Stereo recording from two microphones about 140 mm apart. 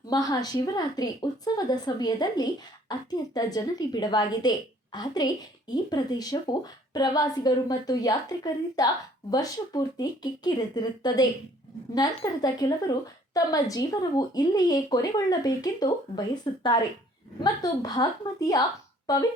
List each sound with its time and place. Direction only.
0.1 s a woman's voice: 25° left (ahead or behind)